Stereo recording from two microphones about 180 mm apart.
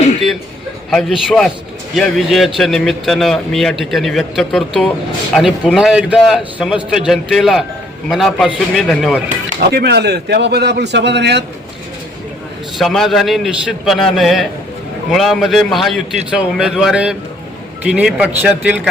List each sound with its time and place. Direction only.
0.9 s a man's voice: centre (ahead or behind)
9.6 s a man's voice: 65° right (ahead or behind)
12.8 s a man's voice: centre (ahead or behind)